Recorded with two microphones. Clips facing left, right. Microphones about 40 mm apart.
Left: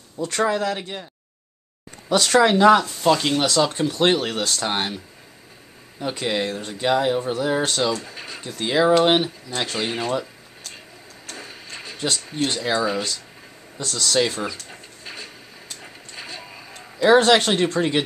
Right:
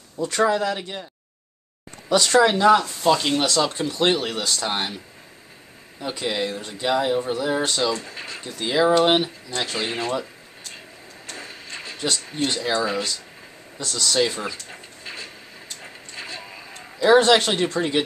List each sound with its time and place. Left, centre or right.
0.2 s speech: centre
0.6 s speech: centre
2.1 s speech: centre
2.8 s speech: centre
5.9 s speech: centre
11.2 s a sound: centre
13.8 s speech: centre
15.8 s a sound: centre
17.0 s speech: centre